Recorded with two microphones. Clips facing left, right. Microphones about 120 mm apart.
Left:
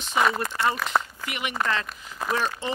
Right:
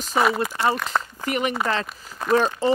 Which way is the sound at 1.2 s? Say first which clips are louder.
Right 5 dB; 40° right (ahead or behind).